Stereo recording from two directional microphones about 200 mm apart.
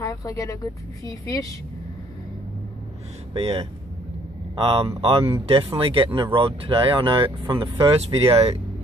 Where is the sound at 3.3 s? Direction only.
30° right (ahead or behind).